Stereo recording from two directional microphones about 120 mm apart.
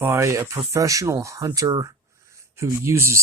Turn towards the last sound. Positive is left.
turn(degrees=-20)  # may be behind; listen again after turning